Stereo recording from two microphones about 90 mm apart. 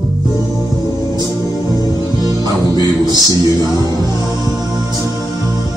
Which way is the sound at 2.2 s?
45° right (ahead or behind).